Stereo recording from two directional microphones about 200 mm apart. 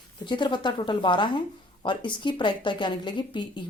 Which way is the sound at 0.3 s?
25° left (ahead or behind).